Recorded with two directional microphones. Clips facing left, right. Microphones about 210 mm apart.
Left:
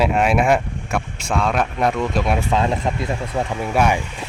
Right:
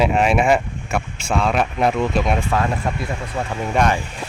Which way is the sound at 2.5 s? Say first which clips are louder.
Left 1 dB; 20° left (ahead or behind).